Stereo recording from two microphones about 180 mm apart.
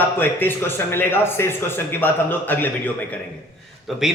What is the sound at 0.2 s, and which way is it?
Speech, 10° left (ahead or behind).